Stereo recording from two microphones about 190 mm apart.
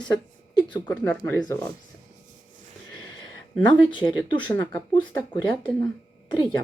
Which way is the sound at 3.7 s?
25° left (ahead or behind).